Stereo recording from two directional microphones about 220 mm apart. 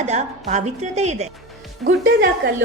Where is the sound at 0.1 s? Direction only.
30° right (ahead or behind).